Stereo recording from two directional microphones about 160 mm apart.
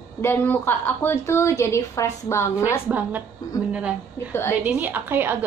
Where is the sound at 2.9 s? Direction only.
10° right (ahead or behind).